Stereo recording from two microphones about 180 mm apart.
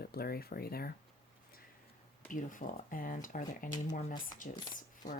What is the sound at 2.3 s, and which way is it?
Speech, 45° left (ahead or behind).